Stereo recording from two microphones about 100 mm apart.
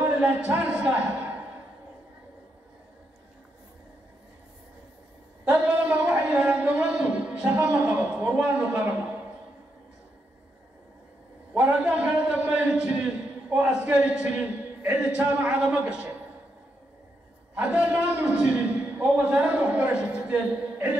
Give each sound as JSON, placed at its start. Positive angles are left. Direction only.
{"t": 0.1, "sound": "a man's voice", "side_deg": -10}
{"t": 5.5, "sound": "a sound", "side_deg": -15}
{"t": 11.5, "sound": "a man's voice", "side_deg": -15}
{"t": 17.6, "sound": "a man's voice", "side_deg": -15}